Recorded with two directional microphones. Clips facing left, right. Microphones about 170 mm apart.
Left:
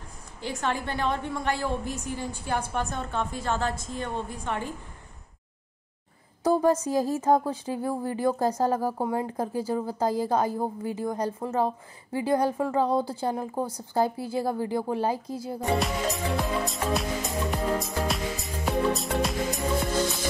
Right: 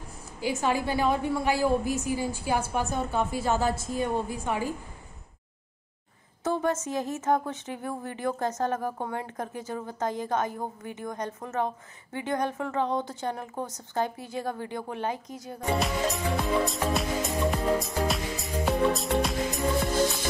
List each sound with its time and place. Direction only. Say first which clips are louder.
0.4 s a woman's voice: right 3 dB; 5° right (ahead or behind)
6.4 s a woman's voice: left 5 dB; 35° left (ahead or behind)
15.8 s music: even; centre (ahead or behind)